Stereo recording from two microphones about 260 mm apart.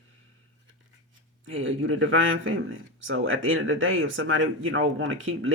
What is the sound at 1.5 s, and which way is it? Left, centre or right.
Speech, right.